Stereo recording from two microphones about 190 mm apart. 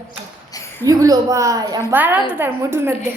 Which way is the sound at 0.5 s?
15° left (ahead or behind).